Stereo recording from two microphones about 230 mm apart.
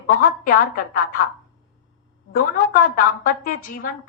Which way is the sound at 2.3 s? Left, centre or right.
Left.